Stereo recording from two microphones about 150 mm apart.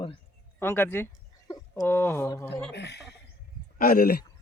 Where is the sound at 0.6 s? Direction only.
15° left (ahead or behind).